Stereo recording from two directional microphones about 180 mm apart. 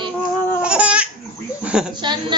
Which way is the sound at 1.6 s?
5° right (ahead or behind).